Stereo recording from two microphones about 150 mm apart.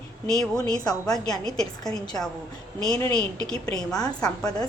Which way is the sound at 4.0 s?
25° left (ahead or behind).